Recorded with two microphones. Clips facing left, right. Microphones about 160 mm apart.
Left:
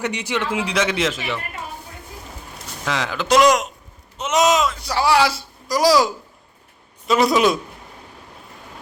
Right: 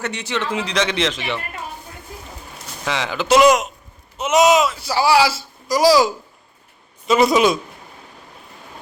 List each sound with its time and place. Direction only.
0.0 s a man's voice: 15° left (ahead or behind)
2.8 s speech: centre (ahead or behind)
7.1 s speech: centre (ahead or behind)